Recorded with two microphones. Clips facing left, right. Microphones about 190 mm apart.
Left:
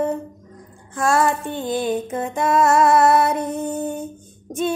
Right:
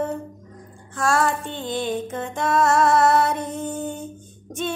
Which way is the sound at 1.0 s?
20° left (ahead or behind).